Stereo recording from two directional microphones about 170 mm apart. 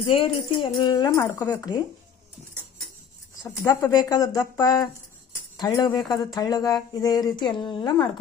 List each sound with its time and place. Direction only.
0.0 s speech: 30° left (ahead or behind); by 1.7 s 15° left (ahead or behind)
3.4 s speech: 20° left (ahead or behind)